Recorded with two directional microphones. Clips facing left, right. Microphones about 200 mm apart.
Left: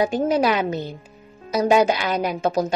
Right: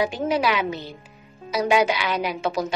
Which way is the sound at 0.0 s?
45° left (ahead or behind).